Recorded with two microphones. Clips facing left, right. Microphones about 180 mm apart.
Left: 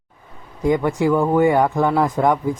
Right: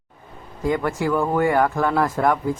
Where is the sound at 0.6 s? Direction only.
20° left (ahead or behind).